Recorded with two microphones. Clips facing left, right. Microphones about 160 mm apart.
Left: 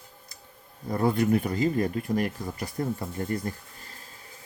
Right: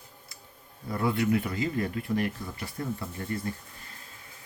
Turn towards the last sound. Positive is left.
turn(degrees=35)  # may be behind; listen again after turning